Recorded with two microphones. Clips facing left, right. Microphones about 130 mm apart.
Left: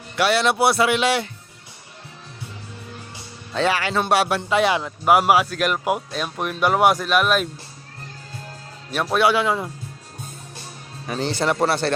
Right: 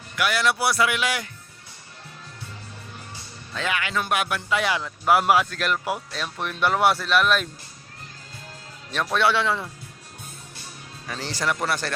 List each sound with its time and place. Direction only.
0.2 s speech: 25° left (ahead or behind)
3.5 s speech: 30° left (ahead or behind); by 7.4 s 10° left (ahead or behind)
9.1 s speech: 10° left (ahead or behind)
11.0 s speech: 25° left (ahead or behind)